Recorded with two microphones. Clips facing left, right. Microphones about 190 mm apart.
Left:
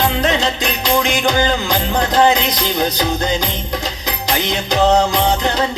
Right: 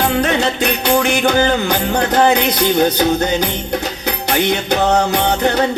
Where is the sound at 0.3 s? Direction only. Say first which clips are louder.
Right 2 dB; 65° right (ahead or behind).